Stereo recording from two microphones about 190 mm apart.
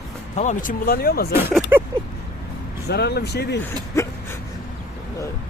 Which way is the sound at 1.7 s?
10° right (ahead or behind).